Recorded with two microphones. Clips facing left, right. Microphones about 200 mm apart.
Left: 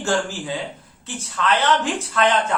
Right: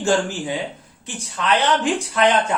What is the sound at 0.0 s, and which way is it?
A man's voice, 15° right (ahead or behind).